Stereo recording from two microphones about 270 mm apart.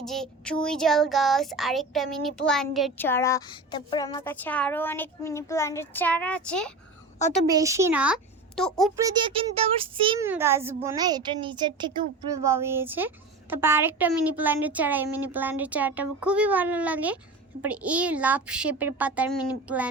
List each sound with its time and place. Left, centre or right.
0.0 s speech: centre
7.4 s speech: centre
9.0 s a child's voice: centre